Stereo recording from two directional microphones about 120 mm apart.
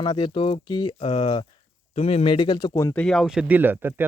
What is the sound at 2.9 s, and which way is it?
Speech, 5° left (ahead or behind).